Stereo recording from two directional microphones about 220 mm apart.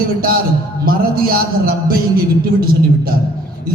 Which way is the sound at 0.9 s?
40° right (ahead or behind).